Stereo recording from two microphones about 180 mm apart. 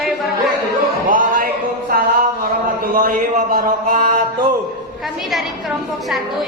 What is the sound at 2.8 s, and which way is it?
Speech, 50° right (ahead or behind).